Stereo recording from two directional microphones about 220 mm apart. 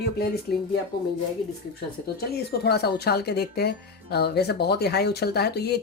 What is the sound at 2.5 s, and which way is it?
Speech, 45° left (ahead or behind).